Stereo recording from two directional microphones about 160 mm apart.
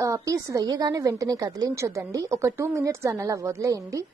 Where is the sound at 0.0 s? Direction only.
20° right (ahead or behind).